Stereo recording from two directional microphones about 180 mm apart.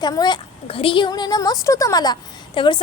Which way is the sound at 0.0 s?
25° left (ahead or behind).